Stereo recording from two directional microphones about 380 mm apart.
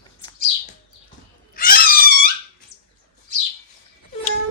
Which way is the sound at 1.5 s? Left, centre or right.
Left.